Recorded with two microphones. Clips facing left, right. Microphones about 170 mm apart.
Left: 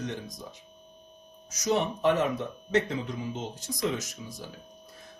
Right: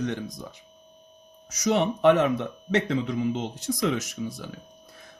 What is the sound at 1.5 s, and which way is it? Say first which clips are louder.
Speech: right 4 dB; 70° right (ahead or behind).